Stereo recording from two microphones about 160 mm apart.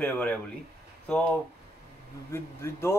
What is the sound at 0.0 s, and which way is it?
Speech, 10° left (ahead or behind).